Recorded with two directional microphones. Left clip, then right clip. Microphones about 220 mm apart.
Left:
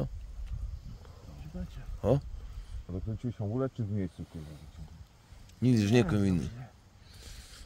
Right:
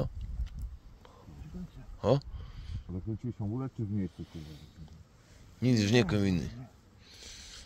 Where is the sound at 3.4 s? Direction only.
25° left (ahead or behind).